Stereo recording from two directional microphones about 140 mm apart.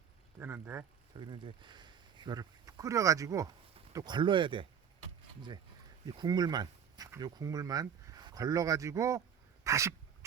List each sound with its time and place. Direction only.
0.3 s speech: 15° right (ahead or behind)
1.1 s speech: 35° right (ahead or behind)
6.1 s speech: 30° right (ahead or behind)
9.6 s dog: 20° right (ahead or behind)